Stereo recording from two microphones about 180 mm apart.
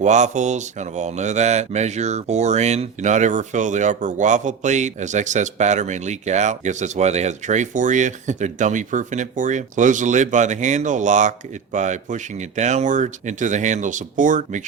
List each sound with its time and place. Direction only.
0.0 s speech: 40° right (ahead or behind)